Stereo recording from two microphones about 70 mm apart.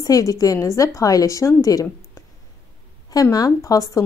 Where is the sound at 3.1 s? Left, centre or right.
Left.